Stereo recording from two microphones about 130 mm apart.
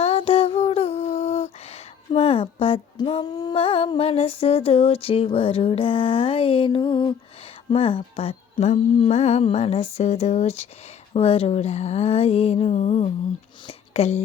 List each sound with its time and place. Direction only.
0.0 s lullaby: 50° left (ahead or behind)
3.2 s music: 30° left (ahead or behind)
3.5 s a sound: 45° left (ahead or behind)
13.7 s speech: 50° left (ahead or behind)